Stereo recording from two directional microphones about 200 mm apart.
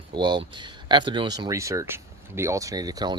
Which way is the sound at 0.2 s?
20° right (ahead or behind).